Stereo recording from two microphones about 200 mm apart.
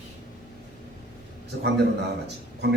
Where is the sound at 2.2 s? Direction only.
60° right (ahead or behind).